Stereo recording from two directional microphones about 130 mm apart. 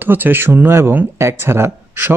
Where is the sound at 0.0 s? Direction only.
15° right (ahead or behind).